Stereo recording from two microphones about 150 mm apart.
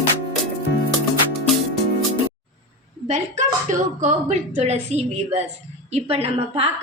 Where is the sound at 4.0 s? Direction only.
50° right (ahead or behind).